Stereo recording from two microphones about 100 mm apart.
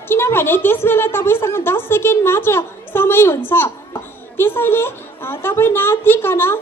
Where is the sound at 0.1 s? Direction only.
25° left (ahead or behind).